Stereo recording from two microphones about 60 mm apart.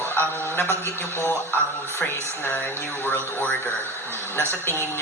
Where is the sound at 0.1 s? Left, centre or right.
Left.